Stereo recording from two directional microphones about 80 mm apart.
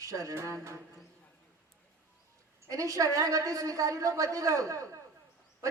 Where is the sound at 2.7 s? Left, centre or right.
Right.